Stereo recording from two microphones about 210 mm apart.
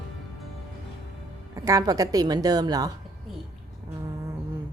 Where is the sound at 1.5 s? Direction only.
15° right (ahead or behind).